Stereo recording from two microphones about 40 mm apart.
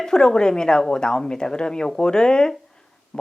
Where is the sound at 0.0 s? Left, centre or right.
Centre.